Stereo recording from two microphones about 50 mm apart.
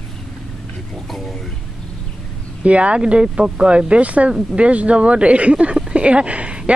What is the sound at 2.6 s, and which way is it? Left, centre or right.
Speech, right.